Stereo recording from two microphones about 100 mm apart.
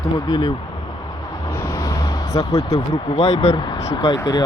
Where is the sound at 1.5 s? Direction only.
25° left (ahead or behind).